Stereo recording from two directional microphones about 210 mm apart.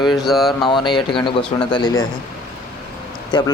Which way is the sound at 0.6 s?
20° left (ahead or behind).